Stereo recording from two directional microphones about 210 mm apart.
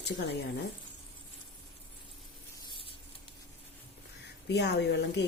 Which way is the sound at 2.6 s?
25° left (ahead or behind).